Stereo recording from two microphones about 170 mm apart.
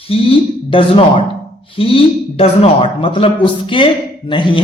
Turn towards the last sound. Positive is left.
turn(degrees=30)  # may be behind; listen again after turning